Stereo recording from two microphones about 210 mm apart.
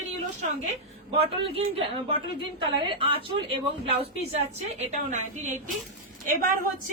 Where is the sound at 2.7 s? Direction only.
25° right (ahead or behind).